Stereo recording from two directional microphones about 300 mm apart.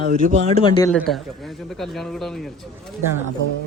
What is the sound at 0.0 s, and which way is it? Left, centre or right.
Speech, right.